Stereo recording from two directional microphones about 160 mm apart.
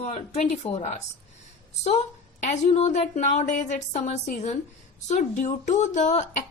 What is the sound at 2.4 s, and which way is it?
A woman's voice, 50° left (ahead or behind).